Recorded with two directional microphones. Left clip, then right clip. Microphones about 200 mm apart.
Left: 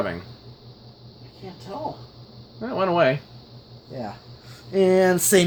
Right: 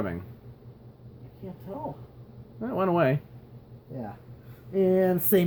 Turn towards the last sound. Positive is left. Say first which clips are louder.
# left 6 dB
turn(degrees=25)  # may be behind; listen again after turning